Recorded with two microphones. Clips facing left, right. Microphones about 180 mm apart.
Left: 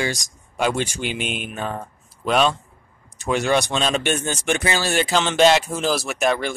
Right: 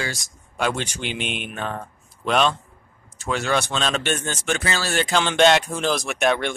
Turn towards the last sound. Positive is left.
turn(degrees=0)  # may be behind; listen again after turning